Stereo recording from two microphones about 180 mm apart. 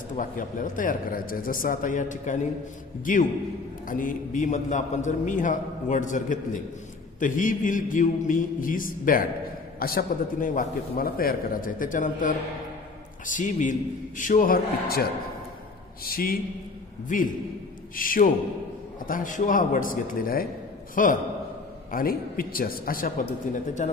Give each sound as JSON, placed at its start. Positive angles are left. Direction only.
{"t": 0.2, "sound": "a man's voice", "side_deg": 50}
{"t": 16.0, "sound": "a man's voice", "side_deg": 55}
{"t": 17.9, "sound": "a man's voice", "side_deg": 50}